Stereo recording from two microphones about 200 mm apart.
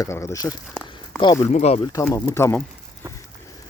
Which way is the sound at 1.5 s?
30° left (ahead or behind).